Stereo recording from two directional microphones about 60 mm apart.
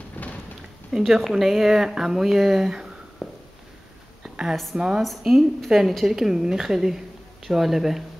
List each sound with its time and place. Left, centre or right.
0.2 s a sound: left
0.9 s speech: centre
3.2 s walk: centre
4.7 s a woman's voice: centre
5.0 s speech: centre